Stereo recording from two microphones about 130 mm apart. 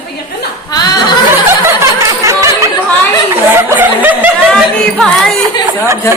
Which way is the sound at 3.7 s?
15° right (ahead or behind).